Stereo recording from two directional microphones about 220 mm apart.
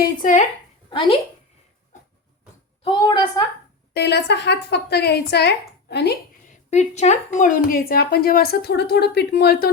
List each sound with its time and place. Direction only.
0.0 s speech: 35° left (ahead or behind)
0.9 s a woman's voice: 25° left (ahead or behind)
2.8 s a woman's voice: 20° left (ahead or behind)
3.9 s speech: 50° left (ahead or behind)
6.7 s speech: 30° left (ahead or behind)